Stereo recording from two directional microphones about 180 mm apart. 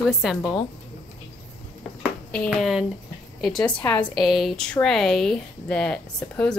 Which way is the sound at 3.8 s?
5° left (ahead or behind).